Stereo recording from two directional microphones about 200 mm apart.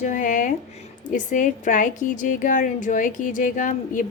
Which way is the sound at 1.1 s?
40° left (ahead or behind).